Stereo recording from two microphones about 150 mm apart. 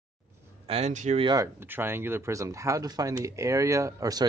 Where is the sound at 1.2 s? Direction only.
25° right (ahead or behind).